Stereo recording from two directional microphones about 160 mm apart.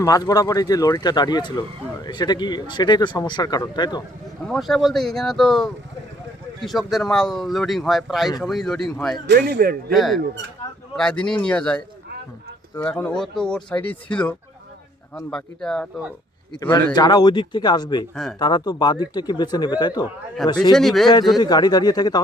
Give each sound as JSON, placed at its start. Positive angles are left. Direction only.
{"t": 0.0, "sound": "speech", "side_deg": 20}
{"t": 4.4, "sound": "speech", "side_deg": 0}
{"t": 9.2, "sound": "a man's voice", "side_deg": -80}
{"t": 9.9, "sound": "speech", "side_deg": 0}
{"t": 16.9, "sound": "speech", "side_deg": 25}
{"t": 20.7, "sound": "speech", "side_deg": 0}
{"t": 21.3, "sound": "speech", "side_deg": 25}